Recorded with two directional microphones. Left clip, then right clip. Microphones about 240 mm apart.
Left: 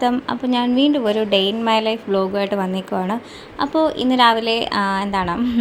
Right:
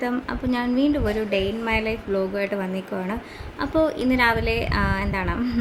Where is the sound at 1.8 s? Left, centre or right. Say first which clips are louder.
Left 5 dB; centre.